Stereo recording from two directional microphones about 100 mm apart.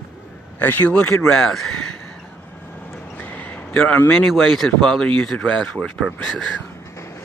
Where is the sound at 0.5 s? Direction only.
20° left (ahead or behind).